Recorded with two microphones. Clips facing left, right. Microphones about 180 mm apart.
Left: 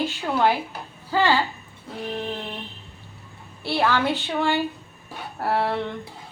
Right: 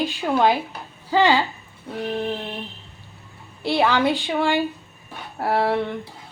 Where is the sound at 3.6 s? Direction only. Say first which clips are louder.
Right 3 dB; 15° right (ahead or behind).